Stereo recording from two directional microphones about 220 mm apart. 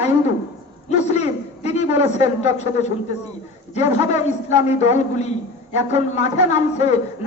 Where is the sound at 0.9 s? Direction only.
30° left (ahead or behind).